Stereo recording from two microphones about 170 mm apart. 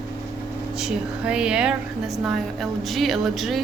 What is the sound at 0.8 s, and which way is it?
A woman's voice, 5° right (ahead or behind).